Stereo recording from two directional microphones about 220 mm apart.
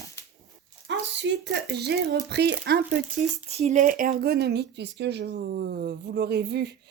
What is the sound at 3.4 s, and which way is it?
Speech, 30° right (ahead or behind).